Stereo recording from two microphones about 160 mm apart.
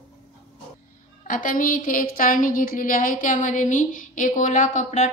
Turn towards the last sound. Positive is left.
turn(degrees=50)  # may be behind; listen again after turning